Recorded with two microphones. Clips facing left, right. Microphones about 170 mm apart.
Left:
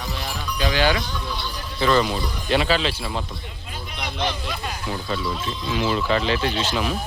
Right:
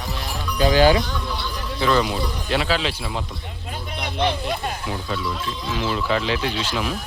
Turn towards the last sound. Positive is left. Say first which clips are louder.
# left 1 dB
turn(degrees=-5)  # may be behind; listen again after turning